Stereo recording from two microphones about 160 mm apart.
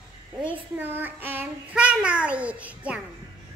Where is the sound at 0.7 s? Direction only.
10° right (ahead or behind).